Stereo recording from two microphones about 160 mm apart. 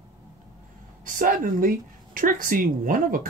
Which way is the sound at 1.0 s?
60° right (ahead or behind).